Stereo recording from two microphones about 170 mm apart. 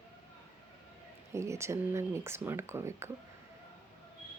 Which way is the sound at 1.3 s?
15° right (ahead or behind).